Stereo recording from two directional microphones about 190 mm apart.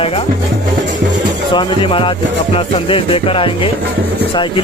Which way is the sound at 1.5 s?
25° left (ahead or behind).